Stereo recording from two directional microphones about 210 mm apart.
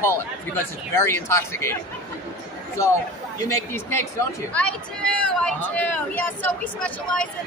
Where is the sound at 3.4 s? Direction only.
15° left (ahead or behind).